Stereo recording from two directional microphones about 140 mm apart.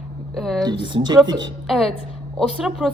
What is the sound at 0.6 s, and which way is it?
Speech, 30° right (ahead or behind).